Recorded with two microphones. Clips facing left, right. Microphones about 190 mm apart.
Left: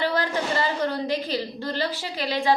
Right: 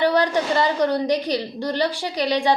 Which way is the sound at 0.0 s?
15° right (ahead or behind).